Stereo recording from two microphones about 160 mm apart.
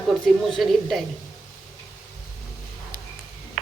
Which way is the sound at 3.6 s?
50° right (ahead or behind).